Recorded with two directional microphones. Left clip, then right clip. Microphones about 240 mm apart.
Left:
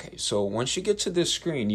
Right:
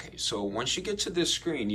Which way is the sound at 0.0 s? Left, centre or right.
Left.